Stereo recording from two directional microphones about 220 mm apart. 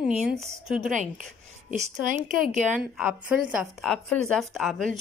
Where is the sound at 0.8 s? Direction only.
35° right (ahead or behind).